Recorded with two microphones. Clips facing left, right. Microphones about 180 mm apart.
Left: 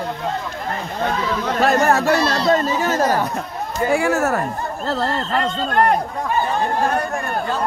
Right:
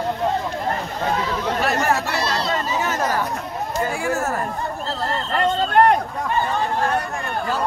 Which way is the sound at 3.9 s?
70° left (ahead or behind).